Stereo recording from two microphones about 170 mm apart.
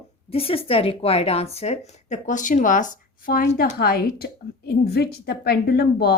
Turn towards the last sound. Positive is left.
turn(degrees=70)  # may be behind; listen again after turning